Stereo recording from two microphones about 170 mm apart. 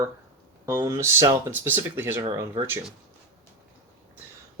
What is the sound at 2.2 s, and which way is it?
Speech, 25° right (ahead or behind).